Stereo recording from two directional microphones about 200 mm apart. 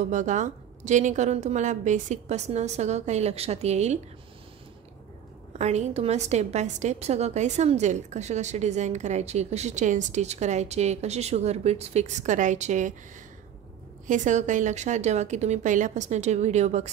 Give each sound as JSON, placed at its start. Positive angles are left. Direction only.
{"t": 0.1, "sound": "a woman's voice", "side_deg": -35}
{"t": 5.6, "sound": "a woman's voice", "side_deg": -35}
{"t": 14.0, "sound": "a woman's voice", "side_deg": -40}